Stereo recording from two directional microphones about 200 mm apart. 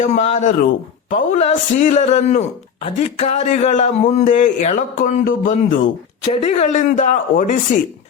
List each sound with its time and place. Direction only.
0.0 s speech: 35° left (ahead or behind)